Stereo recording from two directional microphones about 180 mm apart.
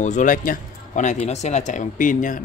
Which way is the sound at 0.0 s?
45° left (ahead or behind).